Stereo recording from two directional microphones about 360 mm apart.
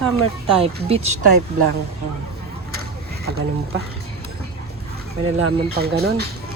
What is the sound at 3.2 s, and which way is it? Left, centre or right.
Speech, right.